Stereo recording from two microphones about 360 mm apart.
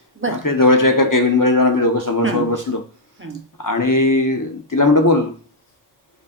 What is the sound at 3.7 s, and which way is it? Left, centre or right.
Speech, left.